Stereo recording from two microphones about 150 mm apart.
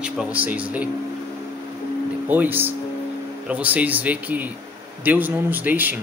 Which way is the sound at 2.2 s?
10° right (ahead or behind).